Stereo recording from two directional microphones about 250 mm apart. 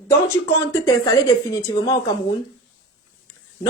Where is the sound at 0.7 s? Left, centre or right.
Centre.